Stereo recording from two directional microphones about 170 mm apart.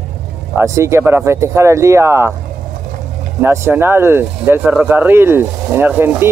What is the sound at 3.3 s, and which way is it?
Speech, 15° right (ahead or behind).